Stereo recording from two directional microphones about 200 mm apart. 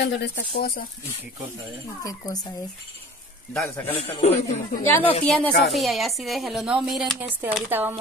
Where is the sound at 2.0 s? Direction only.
20° left (ahead or behind).